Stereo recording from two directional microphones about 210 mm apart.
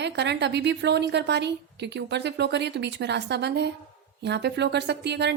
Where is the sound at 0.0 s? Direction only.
55° right (ahead or behind).